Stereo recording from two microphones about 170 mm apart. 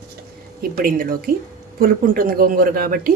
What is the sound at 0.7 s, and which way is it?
Speech, 55° right (ahead or behind).